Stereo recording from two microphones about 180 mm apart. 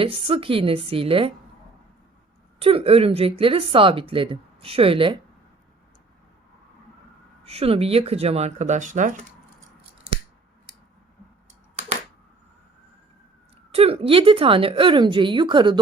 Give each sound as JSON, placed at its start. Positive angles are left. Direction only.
{"t": 0.0, "sound": "a woman's voice", "side_deg": -30}
{"t": 2.6, "sound": "a woman's voice", "side_deg": -30}
{"t": 7.4, "sound": "a woman's voice", "side_deg": -35}
{"t": 13.7, "sound": "a woman's voice", "side_deg": -35}